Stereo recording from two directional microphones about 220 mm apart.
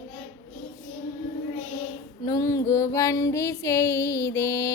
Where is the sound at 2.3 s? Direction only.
15° left (ahead or behind).